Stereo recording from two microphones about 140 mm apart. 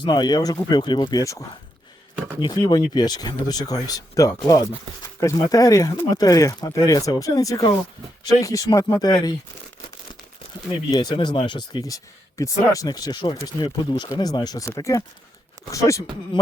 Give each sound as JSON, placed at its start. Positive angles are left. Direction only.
{"t": 0.0, "sound": "speech", "side_deg": 30}
{"t": 10.9, "sound": "speech", "side_deg": 30}